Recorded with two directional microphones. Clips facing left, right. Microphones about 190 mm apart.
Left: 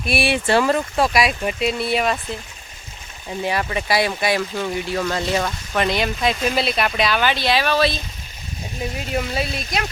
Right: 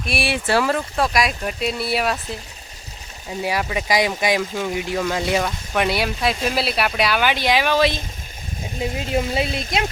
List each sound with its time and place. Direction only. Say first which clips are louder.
0.0 s speech: left 3 dB; centre (ahead or behind)
3.4 s speech: even; 10° right (ahead or behind); by 9.8 s 25° right (ahead or behind)